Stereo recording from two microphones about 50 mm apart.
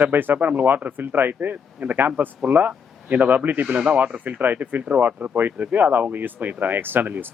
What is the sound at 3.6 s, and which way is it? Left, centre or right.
Speech, right.